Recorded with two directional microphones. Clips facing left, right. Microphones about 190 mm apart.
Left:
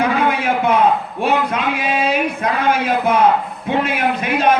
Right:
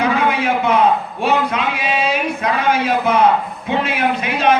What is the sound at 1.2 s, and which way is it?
A man's voice, 50° left (ahead or behind).